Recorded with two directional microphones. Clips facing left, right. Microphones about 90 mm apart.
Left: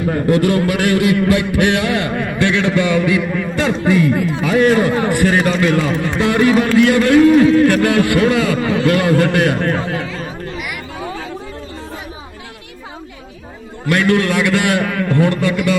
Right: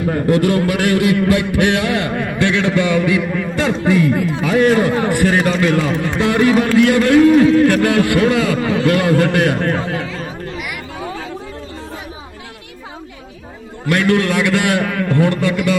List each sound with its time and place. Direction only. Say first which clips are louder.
0.3 s a man's voice: even; 35° right (ahead or behind)
13.9 s a man's voice: even; 20° right (ahead or behind)
14.8 s a man's voice: even; 15° right (ahead or behind)